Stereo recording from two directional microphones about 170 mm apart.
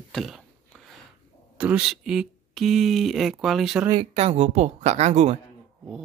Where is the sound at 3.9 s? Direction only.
35° right (ahead or behind).